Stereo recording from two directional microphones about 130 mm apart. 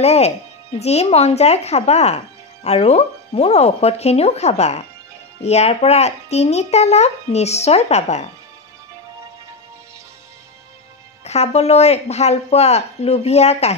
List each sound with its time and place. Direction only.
0.0 s a child's voice: 55° left (ahead or behind)
11.2 s a child's voice: 55° left (ahead or behind)